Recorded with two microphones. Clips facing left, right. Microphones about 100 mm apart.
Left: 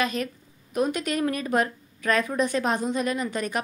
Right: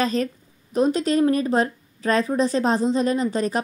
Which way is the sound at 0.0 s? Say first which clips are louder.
Right 4 dB; 35° right (ahead or behind).